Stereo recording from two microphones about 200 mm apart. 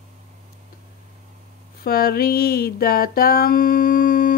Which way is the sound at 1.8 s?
50° left (ahead or behind).